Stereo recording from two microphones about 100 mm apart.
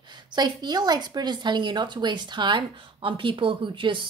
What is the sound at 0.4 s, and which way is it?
Speech, 45° right (ahead or behind).